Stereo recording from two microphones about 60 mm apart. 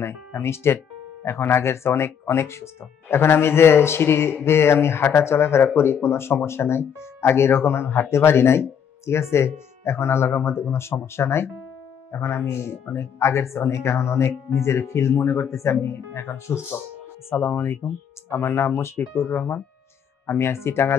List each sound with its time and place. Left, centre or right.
0.0 s speech: left